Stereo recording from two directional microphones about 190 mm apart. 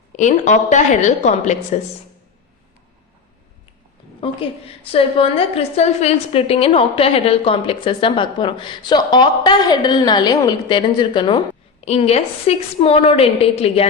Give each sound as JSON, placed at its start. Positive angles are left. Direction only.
{"t": 0.2, "sound": "a woman's voice", "side_deg": 40}
{"t": 4.2, "sound": "a woman's voice", "side_deg": 30}